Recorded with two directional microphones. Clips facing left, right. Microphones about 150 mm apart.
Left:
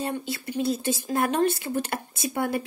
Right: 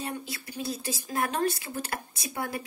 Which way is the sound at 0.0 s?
25° left (ahead or behind).